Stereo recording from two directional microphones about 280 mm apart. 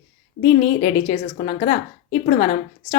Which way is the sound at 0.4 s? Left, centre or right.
Left.